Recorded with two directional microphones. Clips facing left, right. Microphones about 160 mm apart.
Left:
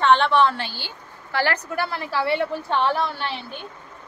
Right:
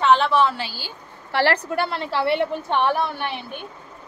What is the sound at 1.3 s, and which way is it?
A woman's voice, 30° right (ahead or behind).